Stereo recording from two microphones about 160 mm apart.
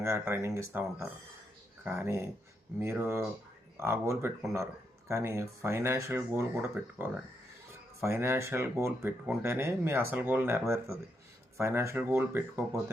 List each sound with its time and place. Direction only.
0.0 s speech: 15° right (ahead or behind)